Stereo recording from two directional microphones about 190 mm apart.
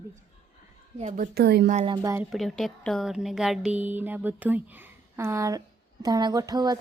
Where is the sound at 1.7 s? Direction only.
25° right (ahead or behind).